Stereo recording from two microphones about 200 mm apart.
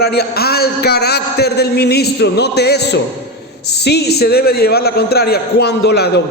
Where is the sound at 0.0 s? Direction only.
50° left (ahead or behind).